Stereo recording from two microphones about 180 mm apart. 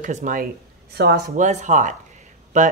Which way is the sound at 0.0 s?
45° right (ahead or behind).